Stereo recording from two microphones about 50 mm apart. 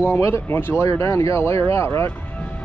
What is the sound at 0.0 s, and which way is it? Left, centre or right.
Speech, left.